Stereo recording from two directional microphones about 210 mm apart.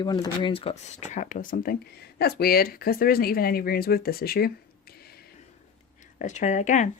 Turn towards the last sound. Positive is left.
turn(degrees=35)  # may be behind; listen again after turning